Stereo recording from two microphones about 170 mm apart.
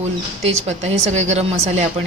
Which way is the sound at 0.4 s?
40° right (ahead or behind).